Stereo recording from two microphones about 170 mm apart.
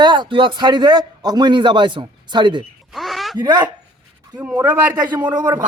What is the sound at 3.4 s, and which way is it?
Speech, 25° right (ahead or behind).